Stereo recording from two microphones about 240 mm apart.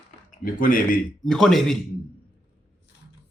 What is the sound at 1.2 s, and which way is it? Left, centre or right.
Speech, centre.